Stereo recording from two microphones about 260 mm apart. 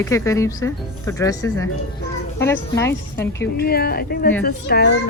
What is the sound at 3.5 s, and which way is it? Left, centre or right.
Speech, left.